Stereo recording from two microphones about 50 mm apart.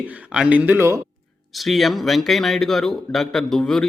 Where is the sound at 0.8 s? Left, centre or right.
Right.